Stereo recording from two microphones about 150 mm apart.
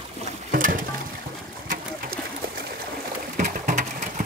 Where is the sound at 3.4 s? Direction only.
55° right (ahead or behind).